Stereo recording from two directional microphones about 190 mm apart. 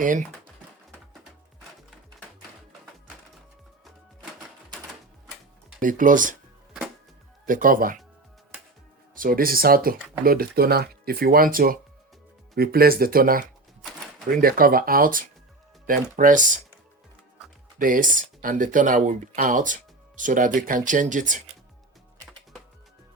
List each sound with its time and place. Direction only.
0.0 s speech: 45° right (ahead or behind)
5.8 s speech: 45° right (ahead or behind)
7.4 s speech: 45° right (ahead or behind)
9.1 s speech: 50° right (ahead or behind)
14.4 s speech: 50° right (ahead or behind)
17.7 s speech: 45° right (ahead or behind)